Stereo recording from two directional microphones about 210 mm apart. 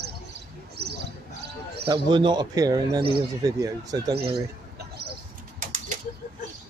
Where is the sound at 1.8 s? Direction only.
25° right (ahead or behind).